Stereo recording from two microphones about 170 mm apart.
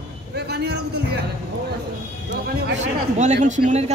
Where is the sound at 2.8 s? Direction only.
45° right (ahead or behind).